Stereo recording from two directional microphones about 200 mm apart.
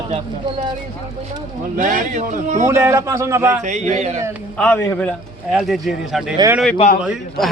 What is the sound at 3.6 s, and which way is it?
Speech, 35° right (ahead or behind).